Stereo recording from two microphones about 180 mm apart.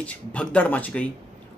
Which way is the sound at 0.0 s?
5° left (ahead or behind).